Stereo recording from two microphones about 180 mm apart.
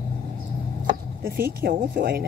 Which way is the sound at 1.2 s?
55° right (ahead or behind).